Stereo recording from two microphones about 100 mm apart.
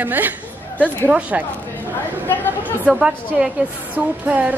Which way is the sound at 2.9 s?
5° right (ahead or behind).